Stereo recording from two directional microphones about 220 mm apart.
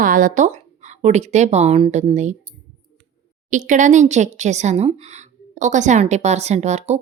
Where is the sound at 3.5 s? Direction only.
35° right (ahead or behind).